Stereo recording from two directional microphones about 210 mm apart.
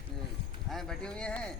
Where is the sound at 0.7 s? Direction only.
Centre (ahead or behind).